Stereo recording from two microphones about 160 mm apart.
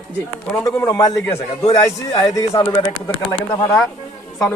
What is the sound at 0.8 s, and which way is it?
A man's voice, 20° left (ahead or behind).